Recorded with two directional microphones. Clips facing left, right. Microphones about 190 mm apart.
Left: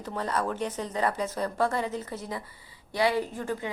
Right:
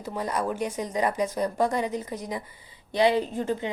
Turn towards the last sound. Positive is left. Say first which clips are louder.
# right 3 dB
turn(degrees=-20)  # may be behind; listen again after turning